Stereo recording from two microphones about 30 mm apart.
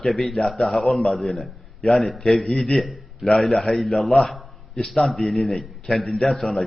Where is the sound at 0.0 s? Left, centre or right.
Centre.